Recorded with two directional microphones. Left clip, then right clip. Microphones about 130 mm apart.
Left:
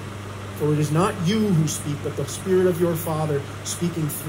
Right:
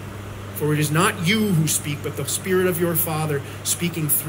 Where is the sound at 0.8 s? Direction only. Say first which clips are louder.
Right 2 dB; 30° right (ahead or behind).